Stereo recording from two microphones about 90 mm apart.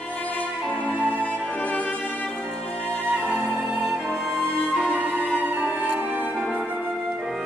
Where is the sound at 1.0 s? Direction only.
15° left (ahead or behind).